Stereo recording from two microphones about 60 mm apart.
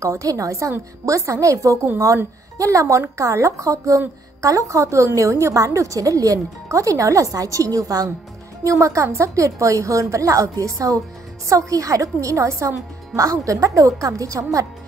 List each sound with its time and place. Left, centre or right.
0.0 s a woman's voice: right
8.6 s a woman's voice: right